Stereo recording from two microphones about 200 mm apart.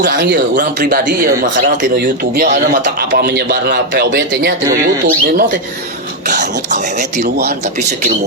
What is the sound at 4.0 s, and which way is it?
Speech, 55° right (ahead or behind).